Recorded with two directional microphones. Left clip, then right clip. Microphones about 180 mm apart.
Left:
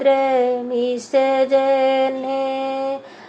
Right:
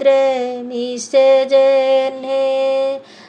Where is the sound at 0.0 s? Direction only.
40° right (ahead or behind).